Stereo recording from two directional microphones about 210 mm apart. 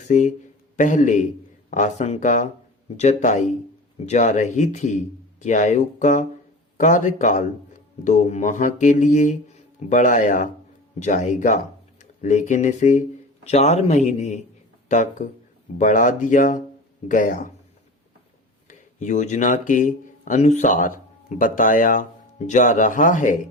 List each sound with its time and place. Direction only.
0.1 s mantra: 35° left (ahead or behind)
11.0 s speech: 35° left (ahead or behind)
15.8 s mantra: 35° left (ahead or behind)
18.7 s speech: 35° left (ahead or behind)